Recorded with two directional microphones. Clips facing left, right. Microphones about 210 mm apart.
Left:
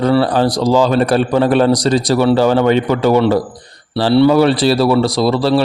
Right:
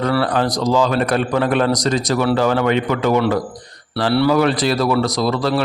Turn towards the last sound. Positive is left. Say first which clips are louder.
# left 5 dB
turn(degrees=30)  # may be behind; listen again after turning